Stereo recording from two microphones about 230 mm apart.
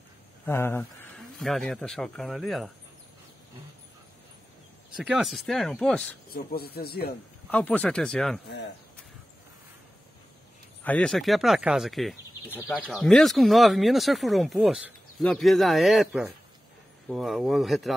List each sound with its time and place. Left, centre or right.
0.5 s speech: centre
4.9 s speech: centre
6.3 s speech: left
7.4 s speech: centre
10.8 s speech: centre